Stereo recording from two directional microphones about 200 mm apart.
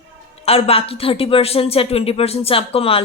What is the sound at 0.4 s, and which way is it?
Speech, 30° left (ahead or behind).